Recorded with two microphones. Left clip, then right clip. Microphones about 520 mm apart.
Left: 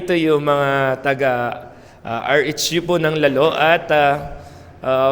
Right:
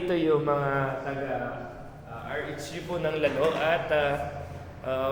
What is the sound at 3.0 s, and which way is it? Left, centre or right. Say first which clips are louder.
A man's voice: left 8 dB; left.